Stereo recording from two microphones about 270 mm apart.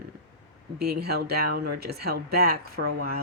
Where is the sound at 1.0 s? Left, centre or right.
Right.